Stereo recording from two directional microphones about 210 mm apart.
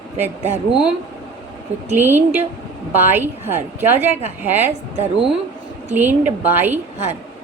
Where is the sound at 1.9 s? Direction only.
10° right (ahead or behind).